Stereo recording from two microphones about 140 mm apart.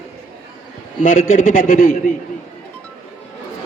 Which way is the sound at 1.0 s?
75° left (ahead or behind).